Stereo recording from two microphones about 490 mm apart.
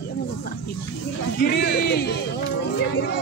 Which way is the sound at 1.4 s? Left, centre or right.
Centre.